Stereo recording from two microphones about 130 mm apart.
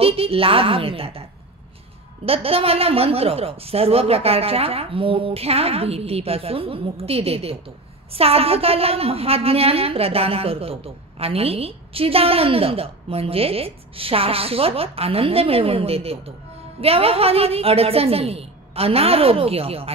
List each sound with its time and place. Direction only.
0.0 s a woman's voice: 50° right (ahead or behind)
2.2 s a woman's voice: 45° right (ahead or behind)